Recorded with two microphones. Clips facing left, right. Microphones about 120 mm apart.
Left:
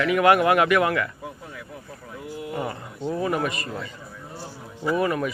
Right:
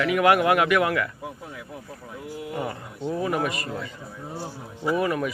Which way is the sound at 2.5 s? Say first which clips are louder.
Left 1 dB; centre (ahead or behind).